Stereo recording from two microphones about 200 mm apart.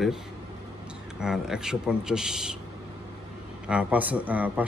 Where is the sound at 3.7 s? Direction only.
5° right (ahead or behind).